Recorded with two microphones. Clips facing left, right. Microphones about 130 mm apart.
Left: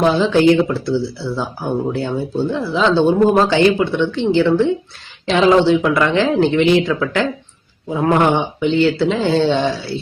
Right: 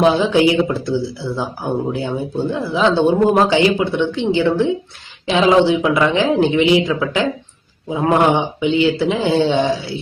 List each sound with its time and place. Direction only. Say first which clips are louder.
0.0 s speech: even; 15° right (ahead or behind)